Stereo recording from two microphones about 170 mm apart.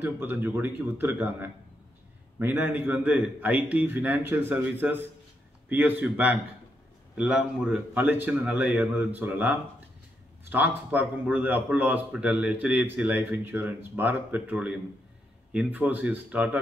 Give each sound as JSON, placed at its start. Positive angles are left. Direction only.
{"t": 0.0, "sound": "a man's voice", "side_deg": -10}